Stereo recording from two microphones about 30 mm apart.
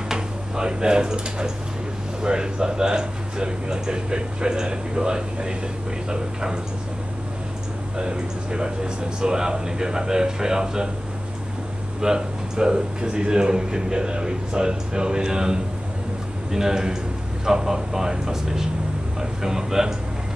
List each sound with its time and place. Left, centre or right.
0.1 s a man's voice: right
8.0 s a man's voice: right
12.0 s a man's voice: right